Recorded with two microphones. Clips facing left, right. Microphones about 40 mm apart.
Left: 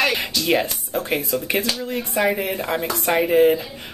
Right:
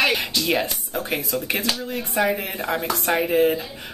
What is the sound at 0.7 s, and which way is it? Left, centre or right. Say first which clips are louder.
Speech: left 2 dB; centre.